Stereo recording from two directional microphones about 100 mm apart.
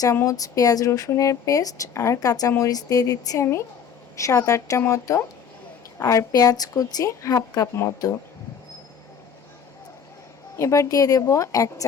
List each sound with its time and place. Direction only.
0.3 s a woman's voice: 35° left (ahead or behind)
10.6 s speech: 30° left (ahead or behind)